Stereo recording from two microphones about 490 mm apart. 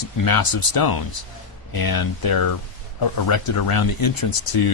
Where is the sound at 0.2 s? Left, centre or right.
Left.